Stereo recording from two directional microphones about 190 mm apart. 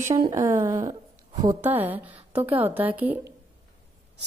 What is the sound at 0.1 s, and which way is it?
A woman's voice, 15° right (ahead or behind).